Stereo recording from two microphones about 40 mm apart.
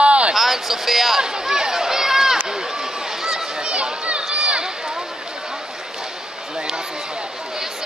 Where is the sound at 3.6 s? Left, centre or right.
Right.